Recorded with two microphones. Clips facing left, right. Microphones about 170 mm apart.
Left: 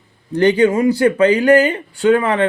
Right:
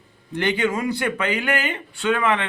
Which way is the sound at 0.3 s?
35° left (ahead or behind).